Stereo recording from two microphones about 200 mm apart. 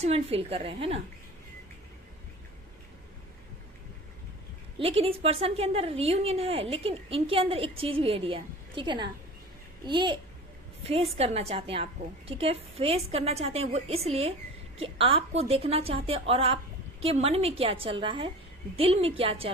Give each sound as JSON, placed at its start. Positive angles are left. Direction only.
{"t": 0.0, "sound": "a woman's voice", "side_deg": -30}
{"t": 4.8, "sound": "a woman's voice", "side_deg": -30}